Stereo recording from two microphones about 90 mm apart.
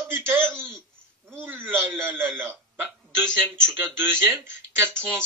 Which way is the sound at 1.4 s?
25° right (ahead or behind).